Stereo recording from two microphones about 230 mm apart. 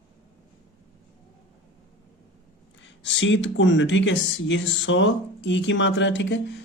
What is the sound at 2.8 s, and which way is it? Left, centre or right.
Speech, left.